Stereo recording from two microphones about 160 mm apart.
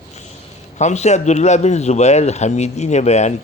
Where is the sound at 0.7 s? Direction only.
45° left (ahead or behind).